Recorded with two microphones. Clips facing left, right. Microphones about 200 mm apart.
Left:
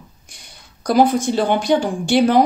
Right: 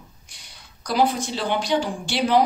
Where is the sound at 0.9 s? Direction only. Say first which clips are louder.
Left 7 dB; 50° left (ahead or behind).